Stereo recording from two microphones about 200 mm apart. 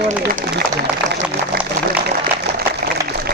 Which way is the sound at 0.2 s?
50° right (ahead or behind).